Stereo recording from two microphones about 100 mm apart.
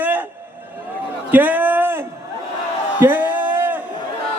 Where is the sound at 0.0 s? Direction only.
20° right (ahead or behind).